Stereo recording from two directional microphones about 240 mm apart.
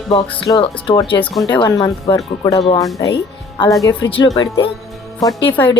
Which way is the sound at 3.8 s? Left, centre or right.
Centre.